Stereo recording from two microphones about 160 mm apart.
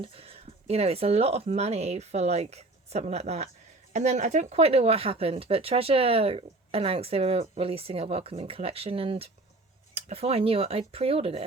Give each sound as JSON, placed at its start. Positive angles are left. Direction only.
{"t": 0.0, "sound": "speech", "side_deg": -35}